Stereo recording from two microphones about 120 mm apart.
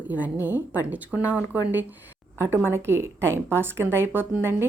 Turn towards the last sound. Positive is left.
turn(degrees=-20)  # may be behind; listen again after turning